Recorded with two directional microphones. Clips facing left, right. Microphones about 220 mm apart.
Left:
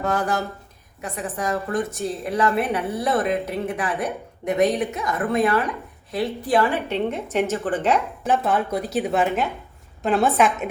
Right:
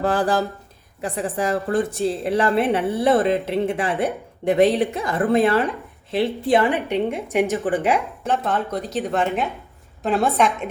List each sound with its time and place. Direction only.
0.0 s a woman's voice: 30° right (ahead or behind); by 8.0 s 10° right (ahead or behind)
8.2 s a woman's voice: 10° left (ahead or behind)